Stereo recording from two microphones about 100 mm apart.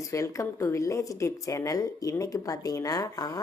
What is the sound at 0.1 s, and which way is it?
A woman's voice, 30° left (ahead or behind).